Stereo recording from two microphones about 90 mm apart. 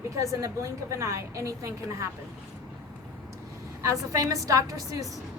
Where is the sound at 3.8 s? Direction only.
40° right (ahead or behind).